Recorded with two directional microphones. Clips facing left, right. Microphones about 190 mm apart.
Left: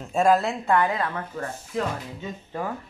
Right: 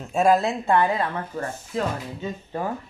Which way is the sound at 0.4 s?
20° right (ahead or behind).